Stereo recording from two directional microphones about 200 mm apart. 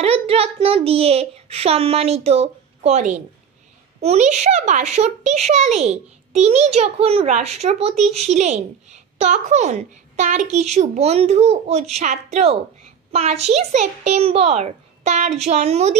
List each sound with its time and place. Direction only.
0.0 s a child's voice: 30° right (ahead or behind)